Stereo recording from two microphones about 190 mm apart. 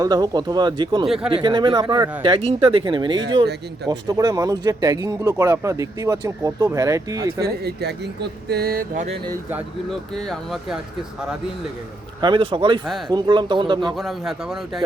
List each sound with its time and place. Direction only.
0.0 s speech: 20° right (ahead or behind)
1.0 s speech: 5° right (ahead or behind)
1.3 s speech: 25° right (ahead or behind)
7.4 s speech: 60° right (ahead or behind)
9.9 s speech: centre (ahead or behind)
12.2 s speech: 25° right (ahead or behind)
12.8 s speech: centre (ahead or behind)
13.1 s speech: 25° right (ahead or behind)
13.9 s speech: centre (ahead or behind)